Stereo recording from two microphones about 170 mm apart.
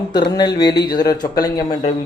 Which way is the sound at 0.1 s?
25° left (ahead or behind).